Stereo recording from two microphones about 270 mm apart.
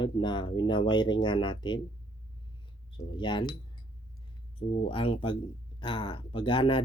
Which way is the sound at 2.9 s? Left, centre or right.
Centre.